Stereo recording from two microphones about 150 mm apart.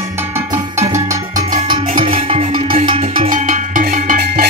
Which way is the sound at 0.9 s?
20° right (ahead or behind).